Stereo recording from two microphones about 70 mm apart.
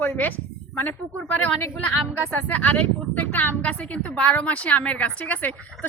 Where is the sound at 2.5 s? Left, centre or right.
Left.